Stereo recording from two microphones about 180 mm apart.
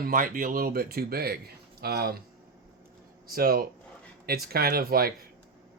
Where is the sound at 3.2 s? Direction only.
55° right (ahead or behind).